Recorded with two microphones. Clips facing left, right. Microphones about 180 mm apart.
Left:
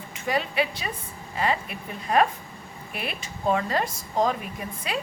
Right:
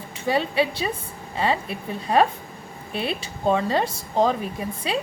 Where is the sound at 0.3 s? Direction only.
30° right (ahead or behind).